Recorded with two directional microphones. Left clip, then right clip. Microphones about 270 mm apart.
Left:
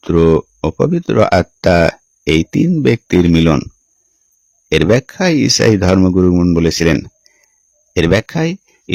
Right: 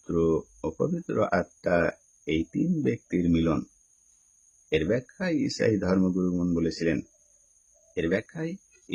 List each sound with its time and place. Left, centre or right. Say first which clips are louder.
0.1 s speech: left 14 dB; left
4.7 s speech: left 14 dB; left
7.9 s speech: left 15 dB; left